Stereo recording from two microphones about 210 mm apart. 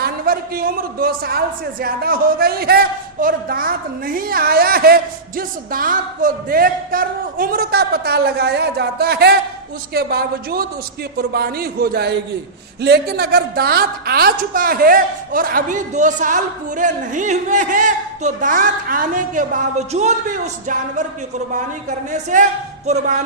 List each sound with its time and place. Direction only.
0.0 s a man's voice: 45° right (ahead or behind)